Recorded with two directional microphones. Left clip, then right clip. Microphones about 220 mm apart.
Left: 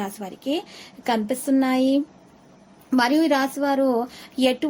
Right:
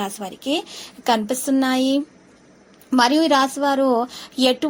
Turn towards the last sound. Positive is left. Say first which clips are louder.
# right 3 dB
turn(degrees=-10)  # may be behind; listen again after turning